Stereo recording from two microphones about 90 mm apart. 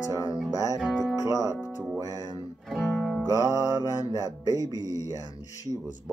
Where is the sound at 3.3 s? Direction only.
40° left (ahead or behind).